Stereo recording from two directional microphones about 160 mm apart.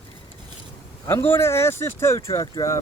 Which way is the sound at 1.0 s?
15° left (ahead or behind).